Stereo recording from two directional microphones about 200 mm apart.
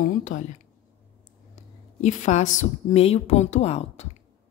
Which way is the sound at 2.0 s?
35° left (ahead or behind).